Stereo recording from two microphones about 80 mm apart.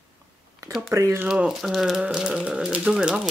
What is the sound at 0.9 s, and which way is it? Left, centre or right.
Speech, right.